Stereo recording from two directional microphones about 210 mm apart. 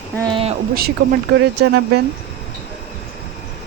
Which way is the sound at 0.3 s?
25° right (ahead or behind).